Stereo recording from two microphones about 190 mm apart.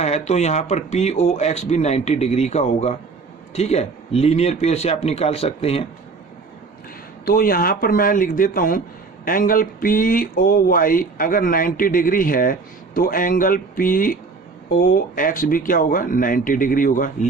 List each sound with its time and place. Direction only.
0.0 s speech: 35° left (ahead or behind)
7.3 s speech: 50° left (ahead or behind)